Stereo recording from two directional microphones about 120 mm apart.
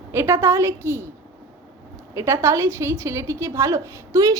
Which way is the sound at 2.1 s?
25° right (ahead or behind).